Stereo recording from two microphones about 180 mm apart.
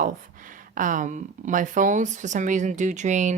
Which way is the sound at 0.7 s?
45° right (ahead or behind).